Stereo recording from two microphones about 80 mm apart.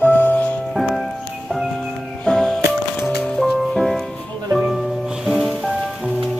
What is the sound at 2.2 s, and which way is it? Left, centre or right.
Music, centre.